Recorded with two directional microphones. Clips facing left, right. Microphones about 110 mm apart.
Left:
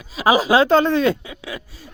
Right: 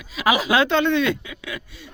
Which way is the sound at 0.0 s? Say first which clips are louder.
Left 4 dB; 35° left (ahead or behind).